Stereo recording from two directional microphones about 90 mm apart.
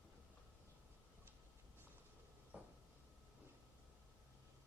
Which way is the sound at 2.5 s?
15° right (ahead or behind).